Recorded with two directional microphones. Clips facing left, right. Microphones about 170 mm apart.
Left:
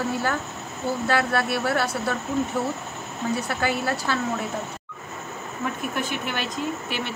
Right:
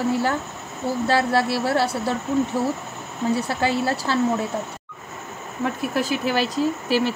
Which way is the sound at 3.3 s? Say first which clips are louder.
Right 2 dB; 30° right (ahead or behind).